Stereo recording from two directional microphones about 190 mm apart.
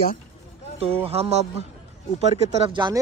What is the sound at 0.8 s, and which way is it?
Speech, 30° right (ahead or behind).